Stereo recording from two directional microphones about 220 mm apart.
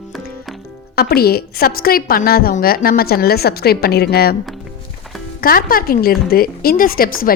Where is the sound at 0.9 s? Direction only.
45° left (ahead or behind).